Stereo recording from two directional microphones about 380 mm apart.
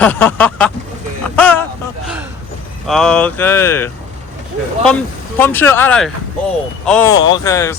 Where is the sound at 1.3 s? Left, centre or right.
Centre.